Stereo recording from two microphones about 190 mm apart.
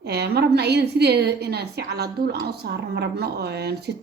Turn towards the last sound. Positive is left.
turn(degrees=-55)  # may be behind; listen again after turning